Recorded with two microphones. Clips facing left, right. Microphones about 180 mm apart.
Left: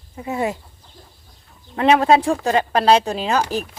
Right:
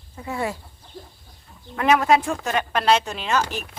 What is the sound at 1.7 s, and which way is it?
Speech, 30° left (ahead or behind).